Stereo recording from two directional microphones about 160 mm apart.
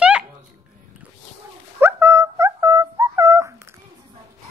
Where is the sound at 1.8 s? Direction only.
15° right (ahead or behind).